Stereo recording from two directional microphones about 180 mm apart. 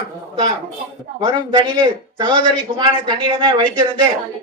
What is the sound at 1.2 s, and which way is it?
A man's voice, 25° right (ahead or behind).